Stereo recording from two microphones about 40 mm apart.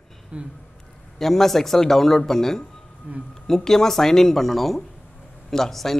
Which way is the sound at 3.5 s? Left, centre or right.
Centre.